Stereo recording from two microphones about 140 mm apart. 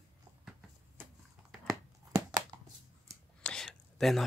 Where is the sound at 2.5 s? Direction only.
30° right (ahead or behind).